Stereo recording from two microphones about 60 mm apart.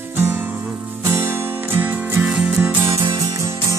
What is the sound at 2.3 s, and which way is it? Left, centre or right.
Music, centre.